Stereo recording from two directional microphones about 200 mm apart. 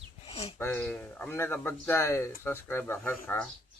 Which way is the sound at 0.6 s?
10° left (ahead or behind).